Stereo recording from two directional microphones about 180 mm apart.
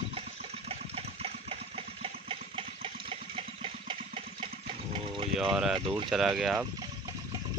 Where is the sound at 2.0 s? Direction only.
30° right (ahead or behind).